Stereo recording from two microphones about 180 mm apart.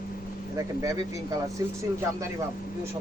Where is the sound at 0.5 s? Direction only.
20° right (ahead or behind).